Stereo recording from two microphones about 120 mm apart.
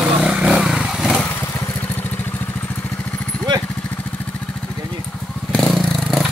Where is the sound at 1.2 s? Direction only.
15° left (ahead or behind).